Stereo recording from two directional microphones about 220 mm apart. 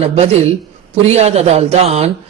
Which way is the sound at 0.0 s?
30° right (ahead or behind).